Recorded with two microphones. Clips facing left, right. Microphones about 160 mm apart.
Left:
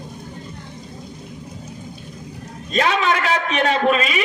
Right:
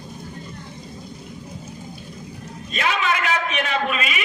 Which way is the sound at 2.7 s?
35° left (ahead or behind).